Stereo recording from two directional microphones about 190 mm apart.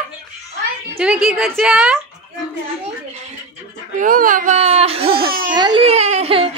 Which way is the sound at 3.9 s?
45° right (ahead or behind).